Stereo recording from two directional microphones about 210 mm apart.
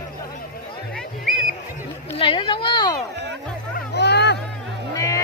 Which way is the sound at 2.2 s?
25° left (ahead or behind).